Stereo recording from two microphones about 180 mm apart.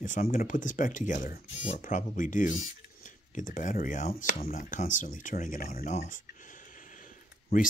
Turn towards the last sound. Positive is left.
turn(degrees=45)  # may be behind; listen again after turning